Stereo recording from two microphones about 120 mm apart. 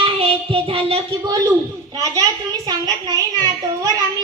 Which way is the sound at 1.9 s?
30° right (ahead or behind).